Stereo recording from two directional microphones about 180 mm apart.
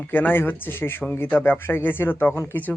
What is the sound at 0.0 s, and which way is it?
Speech, 10° left (ahead or behind).